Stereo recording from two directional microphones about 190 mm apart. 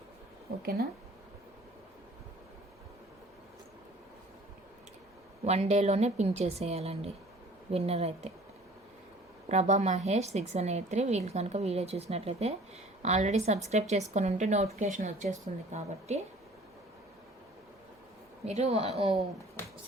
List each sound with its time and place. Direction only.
0.6 s speech: 55° right (ahead or behind)
5.5 s a woman's voice: 35° right (ahead or behind)
9.5 s a woman's voice: 35° right (ahead or behind)
18.4 s a woman's voice: 35° right (ahead or behind)